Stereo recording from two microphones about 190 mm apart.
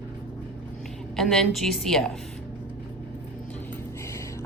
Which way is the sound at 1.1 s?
5° left (ahead or behind).